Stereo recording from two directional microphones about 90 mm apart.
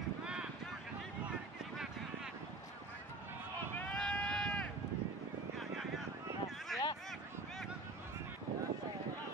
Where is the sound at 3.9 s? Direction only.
10° left (ahead or behind).